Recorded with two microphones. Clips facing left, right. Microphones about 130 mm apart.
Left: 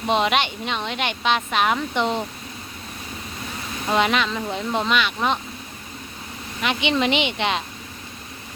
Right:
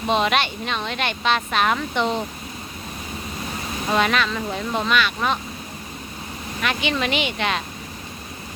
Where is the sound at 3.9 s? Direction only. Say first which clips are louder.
Even; 20° left (ahead or behind).